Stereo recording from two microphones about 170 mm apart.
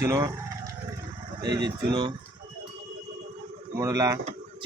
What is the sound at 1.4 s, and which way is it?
Speech, 25° right (ahead or behind).